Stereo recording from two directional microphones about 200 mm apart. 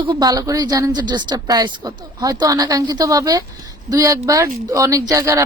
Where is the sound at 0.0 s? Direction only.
20° right (ahead or behind).